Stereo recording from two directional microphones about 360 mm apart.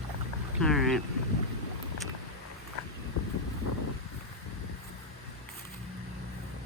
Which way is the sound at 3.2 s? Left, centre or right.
Left.